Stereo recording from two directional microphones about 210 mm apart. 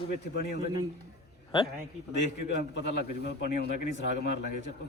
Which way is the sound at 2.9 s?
50° left (ahead or behind).